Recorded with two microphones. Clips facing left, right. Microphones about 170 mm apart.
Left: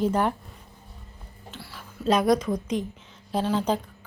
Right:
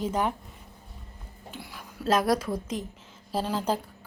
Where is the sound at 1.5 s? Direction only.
15° right (ahead or behind).